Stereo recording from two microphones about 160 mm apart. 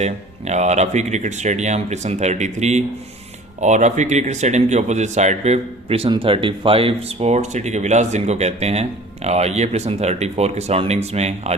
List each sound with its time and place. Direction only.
0.0 s speech: 45° right (ahead or behind)